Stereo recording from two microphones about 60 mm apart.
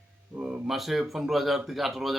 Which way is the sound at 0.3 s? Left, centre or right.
Right.